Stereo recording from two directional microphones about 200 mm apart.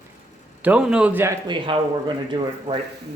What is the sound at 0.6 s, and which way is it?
Speech, 5° right (ahead or behind).